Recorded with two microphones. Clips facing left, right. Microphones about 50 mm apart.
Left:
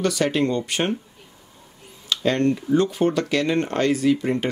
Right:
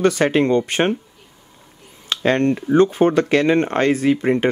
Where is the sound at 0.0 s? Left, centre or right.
Right.